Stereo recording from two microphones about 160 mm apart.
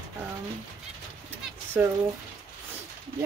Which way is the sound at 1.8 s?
10° right (ahead or behind).